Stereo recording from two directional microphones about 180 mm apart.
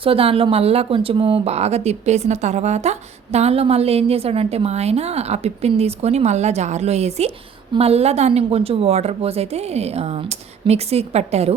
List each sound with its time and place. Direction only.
0.0 s speech: 30° right (ahead or behind)